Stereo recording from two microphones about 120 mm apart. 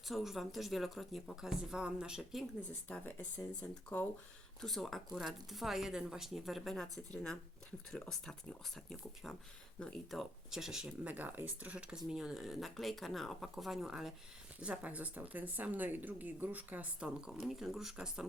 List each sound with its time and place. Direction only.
0.1 s speech: centre (ahead or behind)
2.9 s speech: 10° left (ahead or behind); by 18.3 s 5° right (ahead or behind)